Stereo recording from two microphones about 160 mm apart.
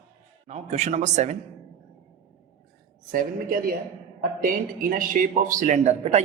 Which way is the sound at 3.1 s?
60° right (ahead or behind).